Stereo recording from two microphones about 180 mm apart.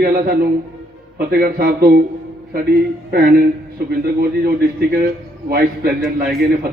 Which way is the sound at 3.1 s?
55° right (ahead or behind).